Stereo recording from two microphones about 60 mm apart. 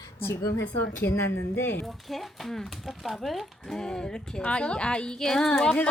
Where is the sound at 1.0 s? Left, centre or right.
Left.